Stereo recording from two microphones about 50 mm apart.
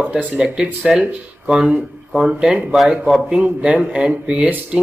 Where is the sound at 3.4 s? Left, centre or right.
Right.